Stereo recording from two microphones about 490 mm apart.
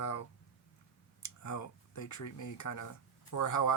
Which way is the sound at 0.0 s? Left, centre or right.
Left.